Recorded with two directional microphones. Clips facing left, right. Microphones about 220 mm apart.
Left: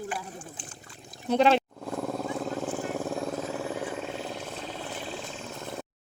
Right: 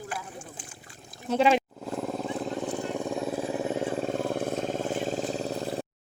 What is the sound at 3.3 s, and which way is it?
Vehicle, 15° right (ahead or behind).